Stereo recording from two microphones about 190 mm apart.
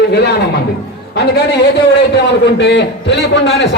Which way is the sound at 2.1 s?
65° left (ahead or behind).